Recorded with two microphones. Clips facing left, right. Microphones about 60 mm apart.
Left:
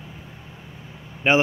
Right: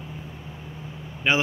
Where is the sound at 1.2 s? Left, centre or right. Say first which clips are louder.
Left 4 dB; left.